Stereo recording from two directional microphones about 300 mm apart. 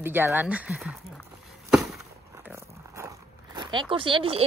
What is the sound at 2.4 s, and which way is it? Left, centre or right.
Dog, centre.